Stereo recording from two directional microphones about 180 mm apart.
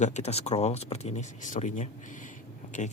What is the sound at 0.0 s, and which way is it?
Speech, 40° left (ahead or behind).